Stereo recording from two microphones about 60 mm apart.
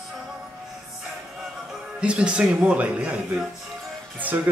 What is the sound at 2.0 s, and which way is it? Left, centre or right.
Speech, centre.